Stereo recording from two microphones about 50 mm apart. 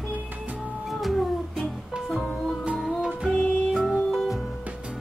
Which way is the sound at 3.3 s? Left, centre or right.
Centre.